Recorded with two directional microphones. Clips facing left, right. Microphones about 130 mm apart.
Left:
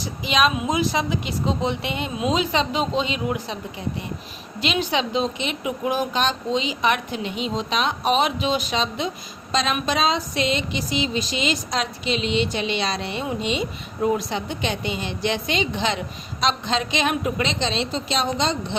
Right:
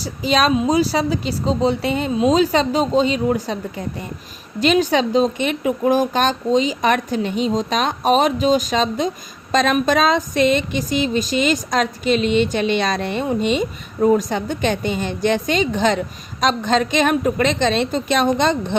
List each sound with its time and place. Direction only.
0.0 s a man's voice: 40° right (ahead or behind); by 18.8 s 55° right (ahead or behind)